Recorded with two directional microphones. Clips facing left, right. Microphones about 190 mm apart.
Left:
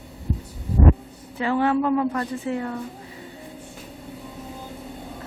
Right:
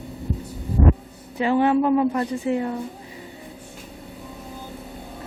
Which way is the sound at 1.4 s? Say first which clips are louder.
Right 3 dB; 20° right (ahead or behind).